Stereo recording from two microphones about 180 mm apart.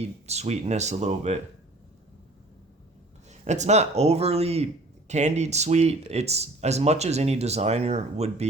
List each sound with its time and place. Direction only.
0.0 s speech: 35° right (ahead or behind)
3.2 s speech: 40° right (ahead or behind)